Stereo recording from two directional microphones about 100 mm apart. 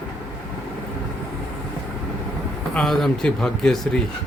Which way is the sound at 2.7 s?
5° left (ahead or behind).